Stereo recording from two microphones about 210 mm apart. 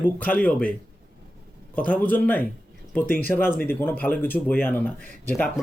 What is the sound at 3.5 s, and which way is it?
Speech, 45° left (ahead or behind).